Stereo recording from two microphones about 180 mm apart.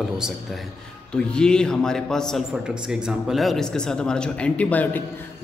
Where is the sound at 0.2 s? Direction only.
Centre (ahead or behind).